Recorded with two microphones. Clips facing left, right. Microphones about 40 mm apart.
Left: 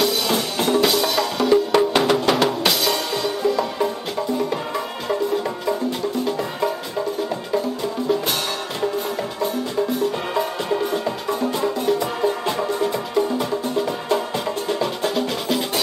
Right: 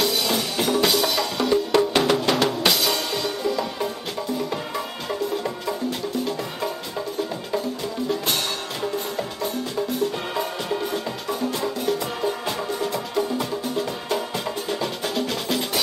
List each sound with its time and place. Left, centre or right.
0.0 s music: centre
8.9 s music: centre